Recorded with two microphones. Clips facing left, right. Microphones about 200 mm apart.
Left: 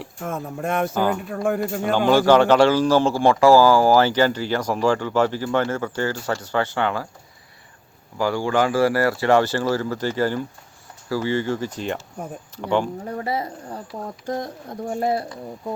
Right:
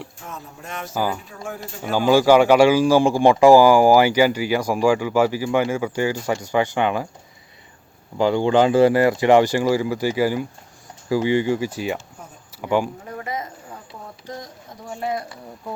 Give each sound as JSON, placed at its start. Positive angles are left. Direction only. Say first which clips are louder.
{"t": 0.2, "sound": "speech", "louder": "left 9 dB", "side_deg": 55}
{"t": 0.9, "sound": "speech", "louder": "right 2 dB", "side_deg": -5}
{"t": 1.3, "sound": "speech", "louder": "left 10 dB", "side_deg": 60}
{"t": 1.8, "sound": "speech", "louder": "right 2 dB", "side_deg": -10}
{"t": 8.2, "sound": "speech", "louder": "right 4 dB", "side_deg": -20}
{"t": 13.1, "sound": "speech", "louder": "left 4 dB", "side_deg": 35}
{"t": 14.3, "sound": "speech", "louder": "left 8 dB", "side_deg": 55}
{"t": 15.0, "sound": "speech", "louder": "left 3 dB", "side_deg": 30}